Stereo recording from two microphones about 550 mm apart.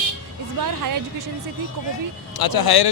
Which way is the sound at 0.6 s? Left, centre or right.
Right.